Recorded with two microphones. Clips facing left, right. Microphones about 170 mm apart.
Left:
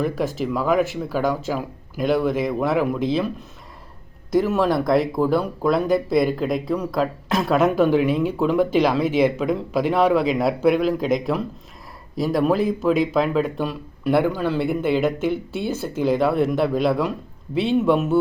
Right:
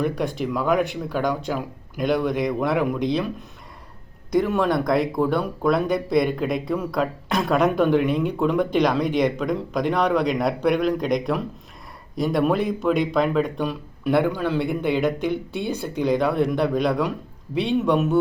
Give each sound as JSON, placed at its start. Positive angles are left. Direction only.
{"t": 0.0, "sound": "speech", "side_deg": 0}
{"t": 4.3, "sound": "speech", "side_deg": 0}